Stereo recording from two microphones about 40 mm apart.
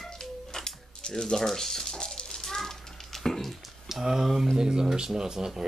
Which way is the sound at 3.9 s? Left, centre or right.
Centre.